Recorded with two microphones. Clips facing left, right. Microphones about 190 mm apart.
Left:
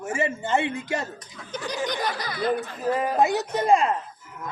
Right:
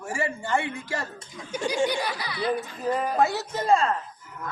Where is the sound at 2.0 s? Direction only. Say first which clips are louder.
Left 2 dB; 45° left (ahead or behind).